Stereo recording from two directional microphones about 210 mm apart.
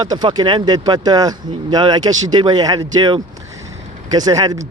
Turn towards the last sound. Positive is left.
turn(degrees=-20)  # may be behind; listen again after turning